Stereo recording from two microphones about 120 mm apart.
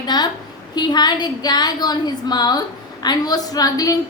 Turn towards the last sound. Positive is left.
turn(degrees=30)  # may be behind; listen again after turning